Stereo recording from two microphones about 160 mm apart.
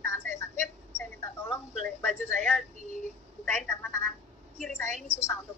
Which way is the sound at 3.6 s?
15° left (ahead or behind).